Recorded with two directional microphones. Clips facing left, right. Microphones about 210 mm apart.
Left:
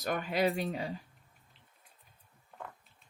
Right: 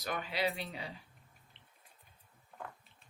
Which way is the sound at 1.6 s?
Centre (ahead or behind).